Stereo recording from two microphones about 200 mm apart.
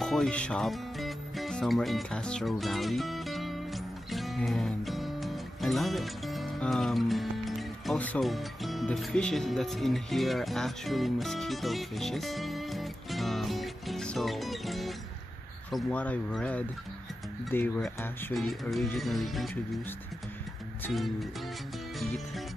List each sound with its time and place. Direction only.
0.0 s music: centre (ahead or behind)
15.7 s speech: 5° left (ahead or behind)
20.8 s speech: centre (ahead or behind)